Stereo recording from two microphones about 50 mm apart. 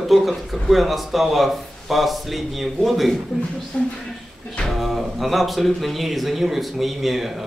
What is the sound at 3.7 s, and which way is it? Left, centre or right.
Speech, left.